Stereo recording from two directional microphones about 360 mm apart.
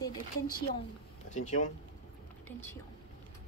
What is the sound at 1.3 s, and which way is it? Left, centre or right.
Speech, centre.